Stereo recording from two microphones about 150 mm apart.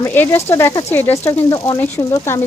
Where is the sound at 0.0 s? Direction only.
15° left (ahead or behind).